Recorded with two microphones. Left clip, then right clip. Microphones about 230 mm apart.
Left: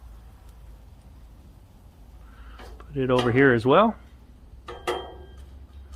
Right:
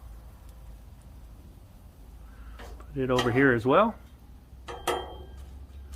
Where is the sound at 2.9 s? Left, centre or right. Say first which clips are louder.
Left 4 dB; left.